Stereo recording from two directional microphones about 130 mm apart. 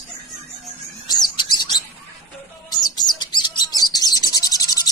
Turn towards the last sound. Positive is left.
turn(degrees=30)  # may be behind; listen again after turning